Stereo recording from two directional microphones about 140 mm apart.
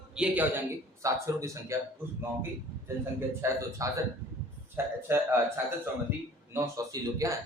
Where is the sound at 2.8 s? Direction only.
20° right (ahead or behind).